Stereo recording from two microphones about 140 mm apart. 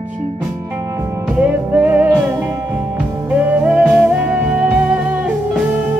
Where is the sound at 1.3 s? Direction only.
10° right (ahead or behind).